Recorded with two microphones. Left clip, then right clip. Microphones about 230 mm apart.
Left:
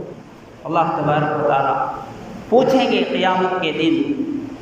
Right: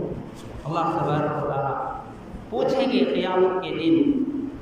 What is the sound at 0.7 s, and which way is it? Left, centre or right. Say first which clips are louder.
A man's voice: left 6 dB; left.